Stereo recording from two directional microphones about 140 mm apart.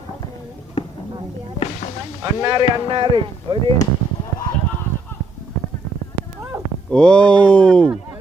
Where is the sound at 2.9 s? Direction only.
40° right (ahead or behind).